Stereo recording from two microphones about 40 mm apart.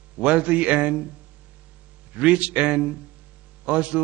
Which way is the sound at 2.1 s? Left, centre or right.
Right.